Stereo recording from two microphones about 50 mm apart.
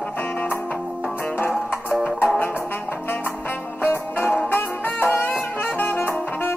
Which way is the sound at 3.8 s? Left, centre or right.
Left.